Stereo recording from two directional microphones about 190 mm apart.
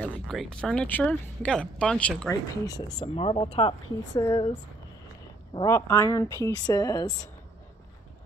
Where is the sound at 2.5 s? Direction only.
20° left (ahead or behind).